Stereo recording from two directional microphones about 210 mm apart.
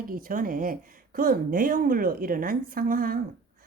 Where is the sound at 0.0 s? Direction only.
40° right (ahead or behind).